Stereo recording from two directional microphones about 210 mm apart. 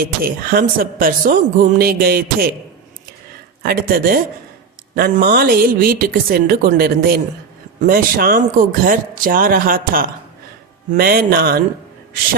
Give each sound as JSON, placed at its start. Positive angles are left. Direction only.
{"t": 0.0, "sound": "speech", "side_deg": -45}
{"t": 3.6, "sound": "speech", "side_deg": -45}